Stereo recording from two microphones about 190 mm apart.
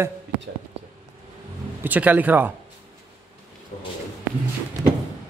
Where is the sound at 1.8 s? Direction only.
10° right (ahead or behind).